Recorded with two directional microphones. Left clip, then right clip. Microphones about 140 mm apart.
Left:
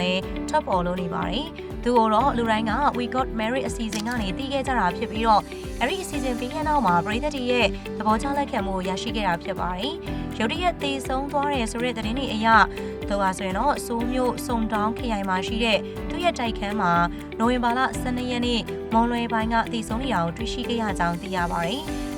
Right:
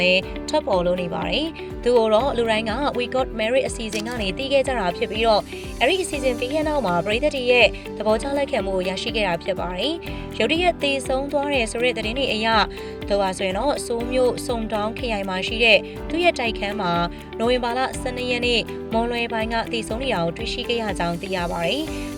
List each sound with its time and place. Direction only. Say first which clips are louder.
0.0 s speech: right 7 dB; 15° right (ahead or behind)